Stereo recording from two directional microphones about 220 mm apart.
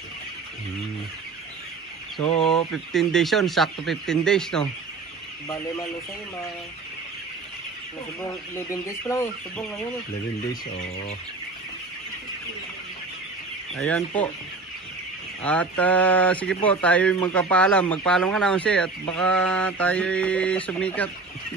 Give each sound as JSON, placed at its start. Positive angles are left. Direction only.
{"t": 2.1, "sound": "speech", "side_deg": 25}
{"t": 2.4, "sound": "speech", "side_deg": 0}
{"t": 8.3, "sound": "speech", "side_deg": 15}
{"t": 13.7, "sound": "speech", "side_deg": 5}
{"t": 15.4, "sound": "speech", "side_deg": 5}